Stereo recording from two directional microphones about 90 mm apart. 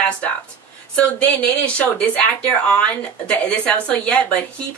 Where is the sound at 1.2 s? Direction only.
15° left (ahead or behind).